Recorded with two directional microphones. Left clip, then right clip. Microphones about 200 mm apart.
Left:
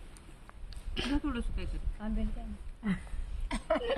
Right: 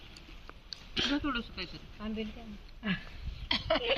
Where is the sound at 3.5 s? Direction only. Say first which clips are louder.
Right 2 dB; 10° left (ahead or behind).